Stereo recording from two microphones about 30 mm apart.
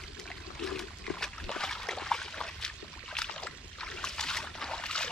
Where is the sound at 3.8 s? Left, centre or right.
Left.